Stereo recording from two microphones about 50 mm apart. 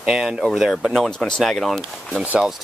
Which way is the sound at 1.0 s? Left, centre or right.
Centre.